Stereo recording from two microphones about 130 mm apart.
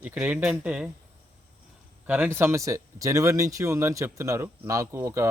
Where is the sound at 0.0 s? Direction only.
10° right (ahead or behind).